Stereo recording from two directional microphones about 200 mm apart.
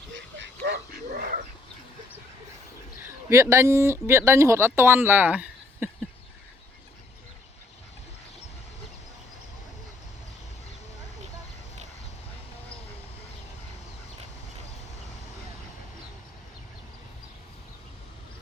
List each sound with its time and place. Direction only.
0.1 s dog: 60° right (ahead or behind)
3.2 s speech: 15° right (ahead or behind)